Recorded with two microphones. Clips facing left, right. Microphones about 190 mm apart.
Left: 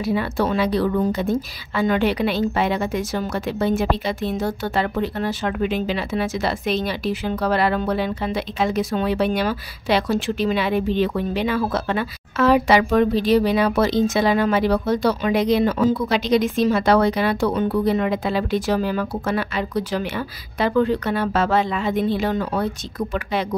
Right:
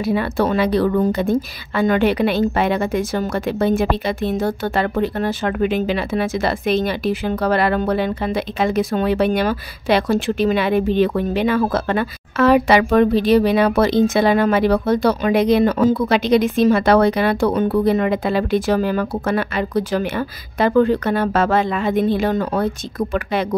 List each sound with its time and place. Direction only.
0.0 s a woman's voice: 55° right (ahead or behind)